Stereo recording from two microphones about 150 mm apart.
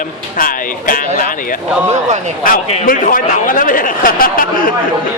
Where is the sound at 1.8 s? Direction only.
50° right (ahead or behind).